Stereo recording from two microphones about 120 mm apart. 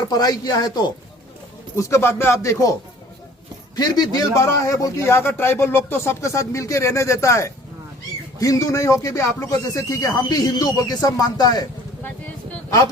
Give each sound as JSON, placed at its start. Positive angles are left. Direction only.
{"t": 0.1, "sound": "speech", "side_deg": 30}
{"t": 1.7, "sound": "a man's voice", "side_deg": 25}
{"t": 3.8, "sound": "a man's voice", "side_deg": 30}